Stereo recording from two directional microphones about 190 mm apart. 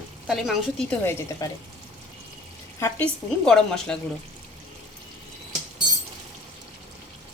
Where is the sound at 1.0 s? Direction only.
15° left (ahead or behind).